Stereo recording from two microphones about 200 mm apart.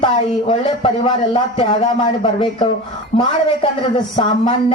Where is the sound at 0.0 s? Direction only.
30° left (ahead or behind).